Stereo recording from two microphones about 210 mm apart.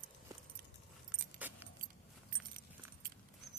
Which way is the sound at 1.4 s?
10° right (ahead or behind).